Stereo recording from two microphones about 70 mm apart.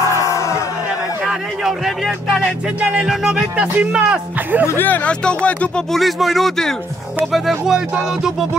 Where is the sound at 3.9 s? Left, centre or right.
Centre.